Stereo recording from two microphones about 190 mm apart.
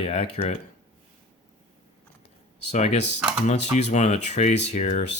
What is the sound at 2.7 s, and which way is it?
Dishes, 35° left (ahead or behind).